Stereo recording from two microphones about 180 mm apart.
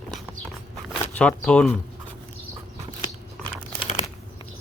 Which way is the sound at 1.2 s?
5° left (ahead or behind).